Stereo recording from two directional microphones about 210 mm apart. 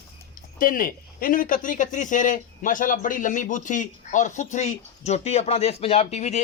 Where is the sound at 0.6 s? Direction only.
40° left (ahead or behind).